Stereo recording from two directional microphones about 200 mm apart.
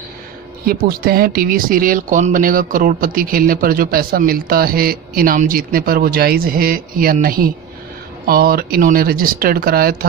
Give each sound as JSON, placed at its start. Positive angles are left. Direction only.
{"t": 0.7, "sound": "speech", "side_deg": -50}